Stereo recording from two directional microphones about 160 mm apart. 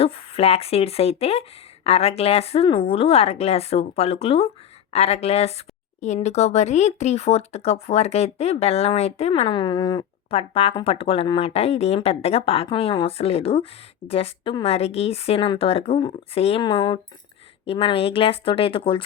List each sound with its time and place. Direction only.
0.0 s speech: 40° left (ahead or behind)